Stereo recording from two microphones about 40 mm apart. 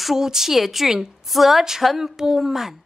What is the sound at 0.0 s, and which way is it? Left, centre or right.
A woman's voice, centre.